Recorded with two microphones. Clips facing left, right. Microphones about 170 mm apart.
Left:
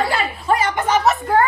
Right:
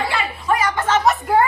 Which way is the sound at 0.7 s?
15° left (ahead or behind).